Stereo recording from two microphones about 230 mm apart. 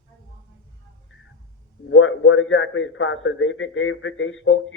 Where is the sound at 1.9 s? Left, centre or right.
Left.